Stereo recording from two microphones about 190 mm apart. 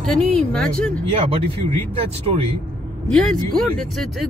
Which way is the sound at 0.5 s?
5° left (ahead or behind).